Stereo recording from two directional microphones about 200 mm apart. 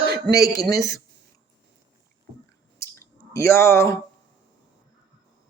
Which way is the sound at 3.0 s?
15° left (ahead or behind).